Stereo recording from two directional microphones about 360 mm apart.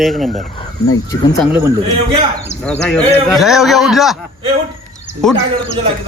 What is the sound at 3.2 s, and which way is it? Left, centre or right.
Speech, centre.